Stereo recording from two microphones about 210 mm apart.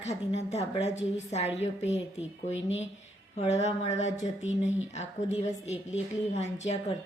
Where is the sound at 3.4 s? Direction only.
30° left (ahead or behind).